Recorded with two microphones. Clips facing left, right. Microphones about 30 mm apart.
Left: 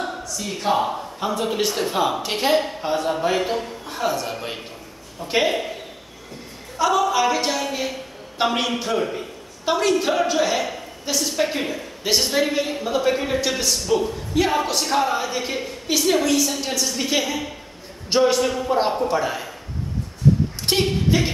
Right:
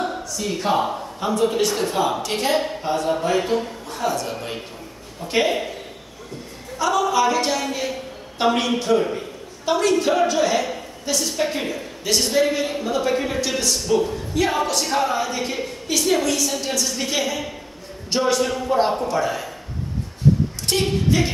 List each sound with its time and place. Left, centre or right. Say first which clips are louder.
0.1 s speech: right 3 dB; centre
6.8 s a woman's voice: even; centre
20.7 s a sound: left 2 dB; left
21.1 s speech: even; centre